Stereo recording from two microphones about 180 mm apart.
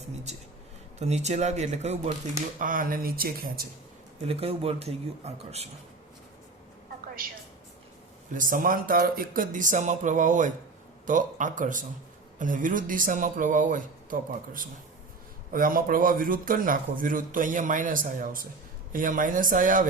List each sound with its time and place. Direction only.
0.9 s speech: 40° right (ahead or behind)
2.6 s speech: 50° right (ahead or behind)
4.3 s speech: 35° right (ahead or behind)
8.3 s speech: 50° right (ahead or behind)